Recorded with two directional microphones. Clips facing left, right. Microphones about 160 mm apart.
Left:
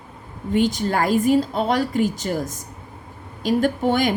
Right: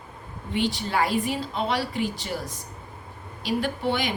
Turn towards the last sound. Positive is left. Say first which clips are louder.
# left 7 dB
turn(degrees=45)  # may be behind; listen again after turning